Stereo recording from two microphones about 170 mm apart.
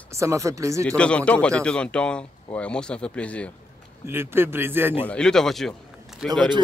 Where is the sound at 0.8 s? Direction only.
5° left (ahead or behind).